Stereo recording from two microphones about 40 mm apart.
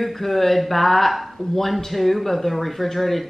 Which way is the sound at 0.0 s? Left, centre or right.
Centre.